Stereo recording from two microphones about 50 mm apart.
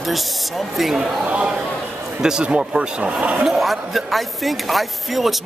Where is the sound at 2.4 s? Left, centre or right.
Right.